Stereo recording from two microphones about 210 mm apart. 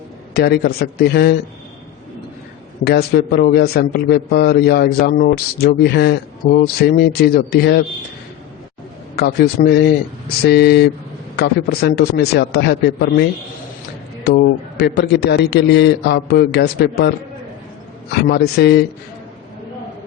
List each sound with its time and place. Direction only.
0.3 s a man's voice: 50° left (ahead or behind)
2.8 s a man's voice: 50° left (ahead or behind)
9.1 s a man's voice: 50° left (ahead or behind)
14.3 s a man's voice: 50° left (ahead or behind)
18.1 s a man's voice: 50° left (ahead or behind)